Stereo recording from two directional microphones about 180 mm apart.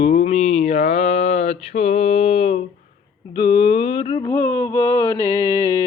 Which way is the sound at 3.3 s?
30° left (ahead or behind).